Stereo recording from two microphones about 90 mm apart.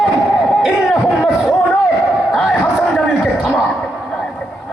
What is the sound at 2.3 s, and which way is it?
A man's voice, centre (ahead or behind).